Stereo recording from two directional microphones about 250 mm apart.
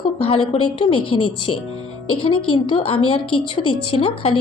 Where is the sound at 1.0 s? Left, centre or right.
Left.